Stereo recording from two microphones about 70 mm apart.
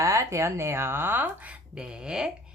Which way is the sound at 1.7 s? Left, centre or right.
Centre.